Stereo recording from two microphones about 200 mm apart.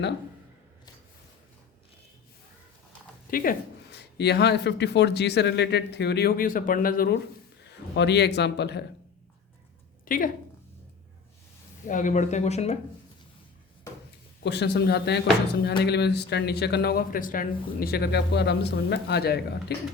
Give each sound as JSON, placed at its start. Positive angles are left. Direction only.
{"t": 3.2, "sound": "speech", "side_deg": 45}
{"t": 7.9, "sound": "speech", "side_deg": 60}
{"t": 10.1, "sound": "speech", "side_deg": 40}
{"t": 11.9, "sound": "speech", "side_deg": 40}
{"t": 14.4, "sound": "speech", "side_deg": 55}